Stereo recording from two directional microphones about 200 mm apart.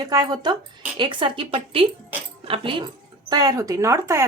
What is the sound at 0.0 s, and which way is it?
A woman's voice, 20° right (ahead or behind).